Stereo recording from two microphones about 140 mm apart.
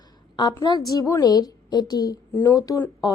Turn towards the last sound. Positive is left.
turn(degrees=25)  # may be behind; listen again after turning